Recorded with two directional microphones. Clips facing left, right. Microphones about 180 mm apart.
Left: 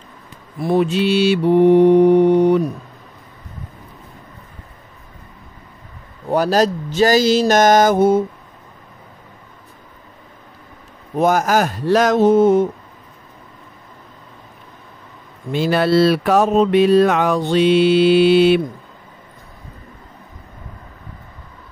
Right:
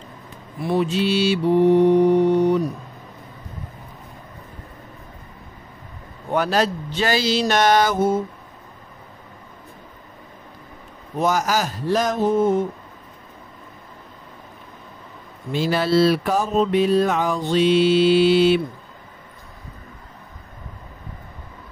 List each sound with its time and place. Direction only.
0.6 s speech: 45° left (ahead or behind)
0.8 s mantra: 60° left (ahead or behind)
6.3 s speech: 40° left (ahead or behind)
11.1 s mantra: 55° left (ahead or behind); by 12.6 s 80° left
15.5 s mantra: 60° left (ahead or behind)